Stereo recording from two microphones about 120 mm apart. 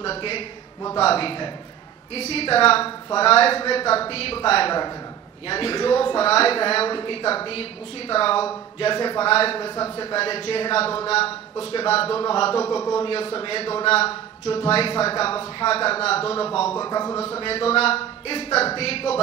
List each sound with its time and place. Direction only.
0.0 s a man's voice: 50° left (ahead or behind)
9.2 s a woman's voice: 50° left (ahead or behind)
11.5 s speech: 45° left (ahead or behind)
12.6 s speech: 25° left (ahead or behind)
13.0 s a man's voice: 50° left (ahead or behind)
16.7 s a man's voice: 35° left (ahead or behind)
17.2 s speech: 50° left (ahead or behind)